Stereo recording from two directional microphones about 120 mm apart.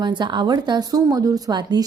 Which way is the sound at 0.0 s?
40° right (ahead or behind).